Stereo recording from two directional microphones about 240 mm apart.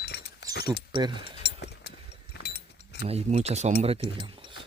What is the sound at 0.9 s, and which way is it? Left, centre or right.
Speech, centre.